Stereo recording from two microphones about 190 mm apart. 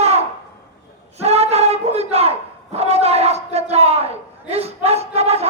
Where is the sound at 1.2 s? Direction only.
35° right (ahead or behind).